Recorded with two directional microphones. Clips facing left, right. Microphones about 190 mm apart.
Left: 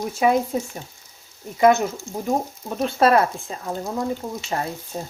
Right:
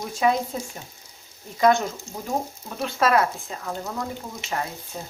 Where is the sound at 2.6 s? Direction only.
35° left (ahead or behind).